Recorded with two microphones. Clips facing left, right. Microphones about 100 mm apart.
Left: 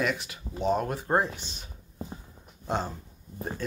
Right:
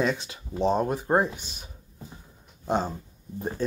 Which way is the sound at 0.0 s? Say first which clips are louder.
Right 3 dB; 25° right (ahead or behind).